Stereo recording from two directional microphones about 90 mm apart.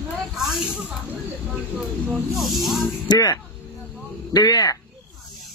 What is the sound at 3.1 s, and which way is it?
Speech, 45° left (ahead or behind).